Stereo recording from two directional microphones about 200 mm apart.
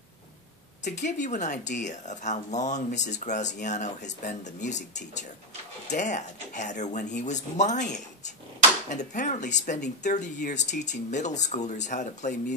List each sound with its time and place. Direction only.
0.8 s speech: 35° left (ahead or behind)
5.9 s speech: 35° left (ahead or behind)